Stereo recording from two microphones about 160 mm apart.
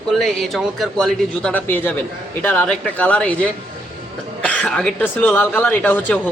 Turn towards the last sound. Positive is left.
turn(degrees=10)  # may be behind; listen again after turning